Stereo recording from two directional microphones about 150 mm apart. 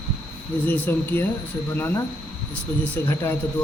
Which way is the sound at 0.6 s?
15° left (ahead or behind).